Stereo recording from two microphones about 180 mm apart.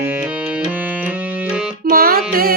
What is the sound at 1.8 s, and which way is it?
Music, 55° right (ahead or behind).